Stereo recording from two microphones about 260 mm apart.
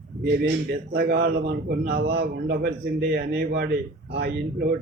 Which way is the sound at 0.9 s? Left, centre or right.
Right.